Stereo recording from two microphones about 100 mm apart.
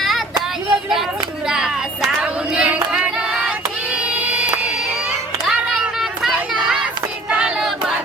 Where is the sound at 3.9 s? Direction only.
10° right (ahead or behind).